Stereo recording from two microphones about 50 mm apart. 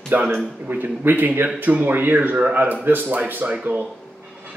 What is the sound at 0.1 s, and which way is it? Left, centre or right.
Speech, right.